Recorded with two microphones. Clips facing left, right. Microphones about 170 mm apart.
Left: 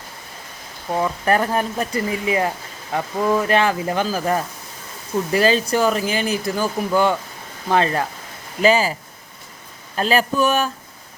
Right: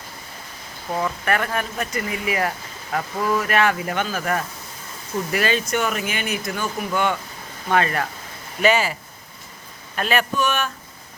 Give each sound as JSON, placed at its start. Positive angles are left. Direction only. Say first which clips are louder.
{"t": 1.0, "sound": "speech", "louder": "left 5 dB", "side_deg": 30}